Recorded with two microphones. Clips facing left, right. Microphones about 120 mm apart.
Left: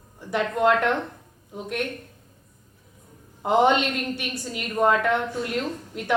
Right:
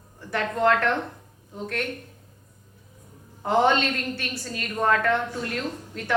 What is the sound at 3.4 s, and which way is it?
A woman's voice, 15° left (ahead or behind).